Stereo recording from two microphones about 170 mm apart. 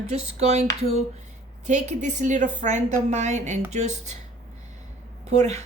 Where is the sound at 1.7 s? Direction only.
45° right (ahead or behind).